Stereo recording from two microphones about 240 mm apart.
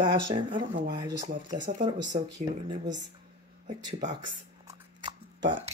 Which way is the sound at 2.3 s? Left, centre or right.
Centre.